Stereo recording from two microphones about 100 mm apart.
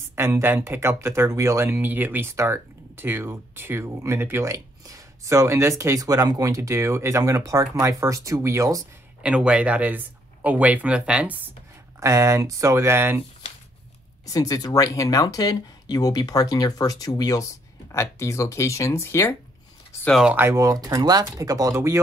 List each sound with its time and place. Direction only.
0.1 s speech: 25° right (ahead or behind)
9.2 s speech: 10° right (ahead or behind)
12.0 s speech: 30° right (ahead or behind)
14.2 s speech: 35° left (ahead or behind)
20.3 s speech: 30° right (ahead or behind)